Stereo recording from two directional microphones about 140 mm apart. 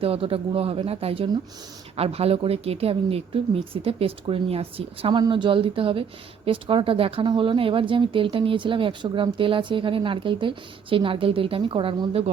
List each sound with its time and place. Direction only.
0.0 s speech: 45° right (ahead or behind)